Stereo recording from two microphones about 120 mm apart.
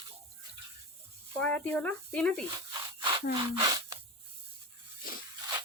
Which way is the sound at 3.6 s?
30° right (ahead or behind).